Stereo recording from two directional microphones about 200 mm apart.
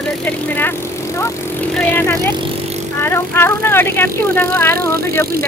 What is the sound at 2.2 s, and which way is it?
Bicycle, 25° right (ahead or behind).